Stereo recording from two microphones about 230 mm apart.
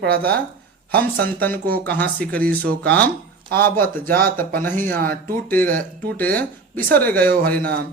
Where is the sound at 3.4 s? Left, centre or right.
Right.